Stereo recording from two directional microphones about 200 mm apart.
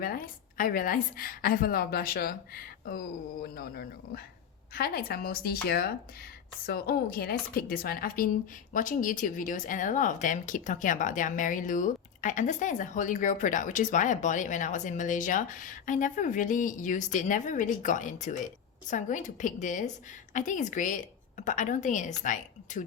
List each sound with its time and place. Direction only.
0.0 s a woman's voice: 45° left (ahead or behind)